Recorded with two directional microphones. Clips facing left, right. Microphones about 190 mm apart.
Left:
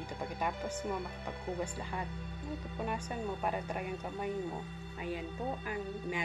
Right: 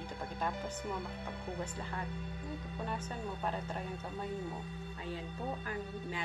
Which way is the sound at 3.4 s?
15° left (ahead or behind).